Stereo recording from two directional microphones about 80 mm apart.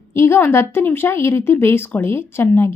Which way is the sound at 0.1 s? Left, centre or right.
Left.